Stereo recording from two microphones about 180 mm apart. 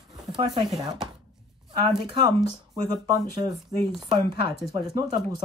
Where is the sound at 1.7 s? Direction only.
25° right (ahead or behind).